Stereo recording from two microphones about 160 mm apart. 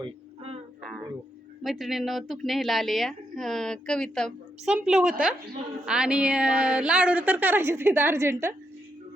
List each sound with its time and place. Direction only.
0.0 s music: 40° right (ahead or behind)
1.6 s a woman's voice: centre (ahead or behind)